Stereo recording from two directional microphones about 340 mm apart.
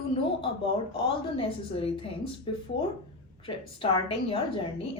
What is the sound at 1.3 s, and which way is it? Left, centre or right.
A woman's voice, centre.